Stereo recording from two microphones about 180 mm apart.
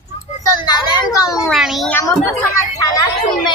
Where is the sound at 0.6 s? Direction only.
25° left (ahead or behind).